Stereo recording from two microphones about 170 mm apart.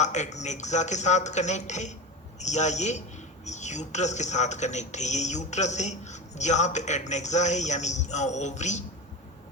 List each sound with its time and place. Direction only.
0.0 s a man's voice: 45° left (ahead or behind)